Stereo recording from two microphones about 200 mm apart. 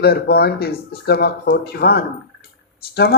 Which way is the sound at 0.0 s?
50° left (ahead or behind).